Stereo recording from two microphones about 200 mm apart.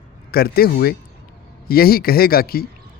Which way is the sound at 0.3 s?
50° left (ahead or behind).